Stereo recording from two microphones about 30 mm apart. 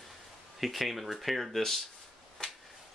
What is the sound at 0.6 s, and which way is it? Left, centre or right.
Speech, centre.